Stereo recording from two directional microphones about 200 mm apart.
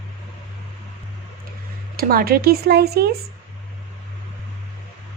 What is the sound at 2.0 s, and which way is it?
Speech, 50° right (ahead or behind).